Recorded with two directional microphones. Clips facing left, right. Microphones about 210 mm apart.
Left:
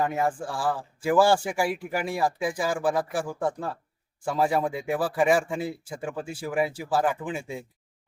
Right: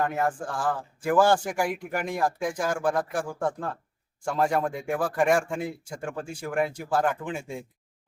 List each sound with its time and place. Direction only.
0.0 s a man's voice: 5° left (ahead or behind)